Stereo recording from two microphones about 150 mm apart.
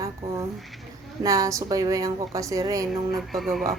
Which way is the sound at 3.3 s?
Centre (ahead or behind).